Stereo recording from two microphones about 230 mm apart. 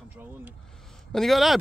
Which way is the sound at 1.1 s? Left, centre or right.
Centre.